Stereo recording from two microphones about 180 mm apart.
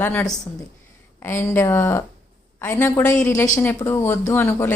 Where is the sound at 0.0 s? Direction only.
10° left (ahead or behind).